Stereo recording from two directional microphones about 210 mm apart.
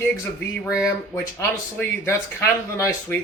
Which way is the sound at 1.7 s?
10° left (ahead or behind).